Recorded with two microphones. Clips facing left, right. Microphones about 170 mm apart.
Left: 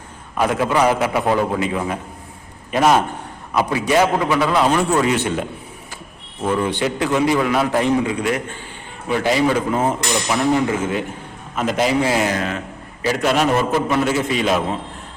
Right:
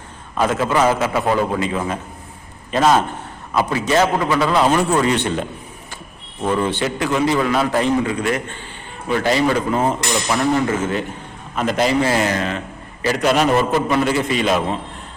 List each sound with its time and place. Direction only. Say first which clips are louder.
0.3 s a man's voice: even; 15° left (ahead or behind)